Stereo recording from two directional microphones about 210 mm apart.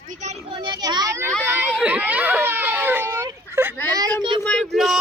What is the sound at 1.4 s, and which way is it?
Children playing, 10° right (ahead or behind).